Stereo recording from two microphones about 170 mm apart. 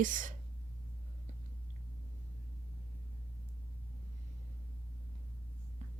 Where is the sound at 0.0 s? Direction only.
50° right (ahead or behind).